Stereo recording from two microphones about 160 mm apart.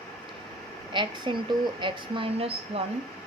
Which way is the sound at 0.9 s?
30° right (ahead or behind).